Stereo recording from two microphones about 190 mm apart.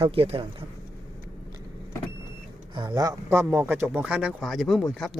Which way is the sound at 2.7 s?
20° right (ahead or behind).